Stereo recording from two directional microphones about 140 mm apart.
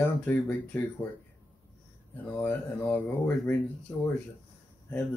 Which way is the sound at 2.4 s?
15° left (ahead or behind).